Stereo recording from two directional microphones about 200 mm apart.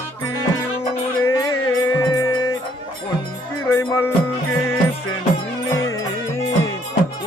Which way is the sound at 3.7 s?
15° left (ahead or behind).